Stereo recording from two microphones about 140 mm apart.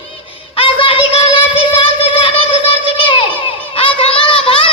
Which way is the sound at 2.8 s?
35° left (ahead or behind).